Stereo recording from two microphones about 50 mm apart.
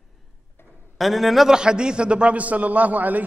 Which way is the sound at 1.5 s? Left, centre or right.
Centre.